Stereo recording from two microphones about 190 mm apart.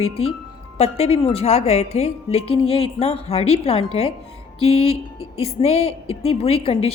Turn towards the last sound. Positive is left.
turn(degrees=30)  # may be behind; listen again after turning